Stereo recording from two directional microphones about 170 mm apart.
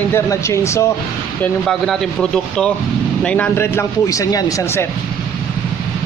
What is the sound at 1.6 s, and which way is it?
Speech, centre (ahead or behind).